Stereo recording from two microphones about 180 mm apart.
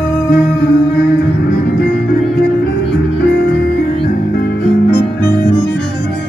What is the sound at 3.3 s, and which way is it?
Music, 70° left (ahead or behind).